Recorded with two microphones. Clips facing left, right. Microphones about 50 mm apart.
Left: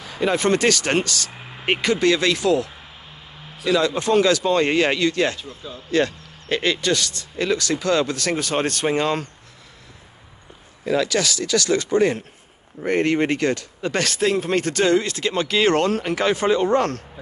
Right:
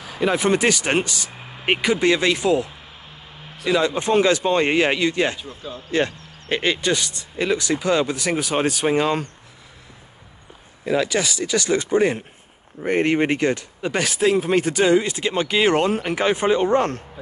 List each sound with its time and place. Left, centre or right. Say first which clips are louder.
0.0 s speech: even; centre
10.9 s speech: even; centre